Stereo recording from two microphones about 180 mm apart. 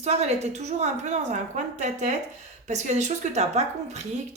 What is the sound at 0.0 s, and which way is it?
Speech, 35° right (ahead or behind).